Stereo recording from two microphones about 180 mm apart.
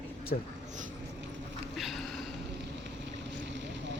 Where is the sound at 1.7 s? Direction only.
Centre (ahead or behind).